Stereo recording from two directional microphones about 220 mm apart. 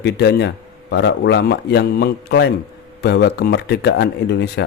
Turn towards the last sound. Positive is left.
turn(degrees=50)  # may be behind; listen again after turning